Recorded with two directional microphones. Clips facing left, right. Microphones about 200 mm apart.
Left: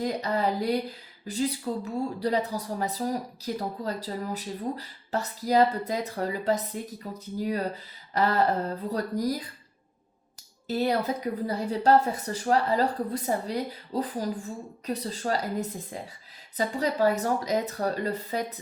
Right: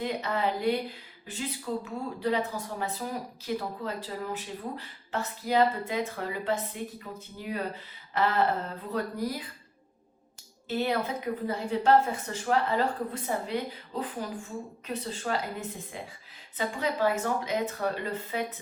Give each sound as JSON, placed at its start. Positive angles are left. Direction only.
{"t": 0.0, "sound": "speech", "side_deg": 40}
{"t": 10.7, "sound": "speech", "side_deg": 40}